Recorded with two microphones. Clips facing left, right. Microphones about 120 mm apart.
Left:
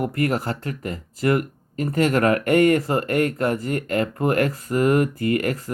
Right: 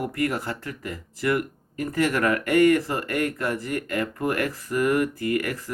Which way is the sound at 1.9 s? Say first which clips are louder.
Left 4 dB; 60° left (ahead or behind).